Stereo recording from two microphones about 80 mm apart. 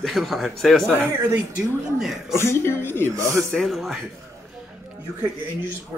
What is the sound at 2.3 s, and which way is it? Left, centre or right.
Speech, left.